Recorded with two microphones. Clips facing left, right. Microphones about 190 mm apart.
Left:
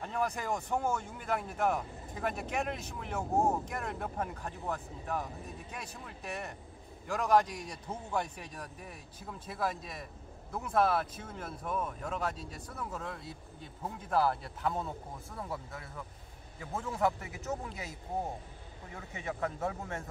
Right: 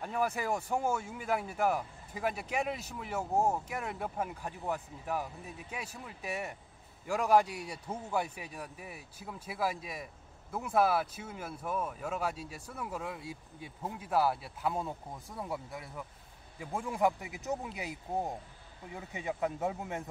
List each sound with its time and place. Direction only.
0.0 s speech: 5° right (ahead or behind)
18.9 s speech: 15° right (ahead or behind)